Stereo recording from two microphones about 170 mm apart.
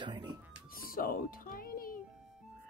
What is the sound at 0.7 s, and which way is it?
Music, 60° left (ahead or behind).